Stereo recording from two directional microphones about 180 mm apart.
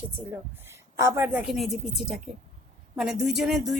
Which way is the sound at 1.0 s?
15° right (ahead or behind).